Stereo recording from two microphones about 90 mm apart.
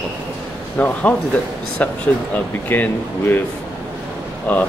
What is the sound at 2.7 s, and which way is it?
Speech, 20° left (ahead or behind).